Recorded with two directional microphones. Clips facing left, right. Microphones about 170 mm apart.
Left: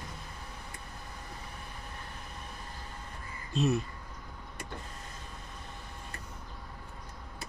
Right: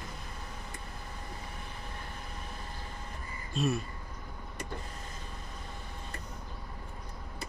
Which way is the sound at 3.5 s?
20° left (ahead or behind).